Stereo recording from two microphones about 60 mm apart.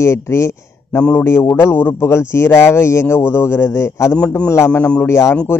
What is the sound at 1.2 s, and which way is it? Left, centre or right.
Speech, left.